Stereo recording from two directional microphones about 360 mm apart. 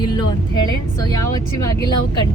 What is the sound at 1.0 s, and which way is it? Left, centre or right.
Speech, centre.